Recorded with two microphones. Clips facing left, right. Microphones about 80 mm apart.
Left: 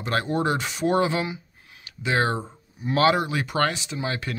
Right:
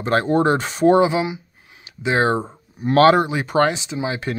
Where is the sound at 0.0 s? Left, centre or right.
Right.